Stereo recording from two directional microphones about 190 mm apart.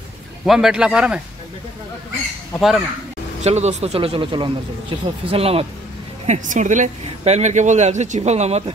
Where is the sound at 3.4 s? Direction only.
35° right (ahead or behind).